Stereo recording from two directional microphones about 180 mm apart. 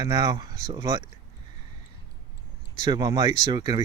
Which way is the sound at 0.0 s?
20° right (ahead or behind).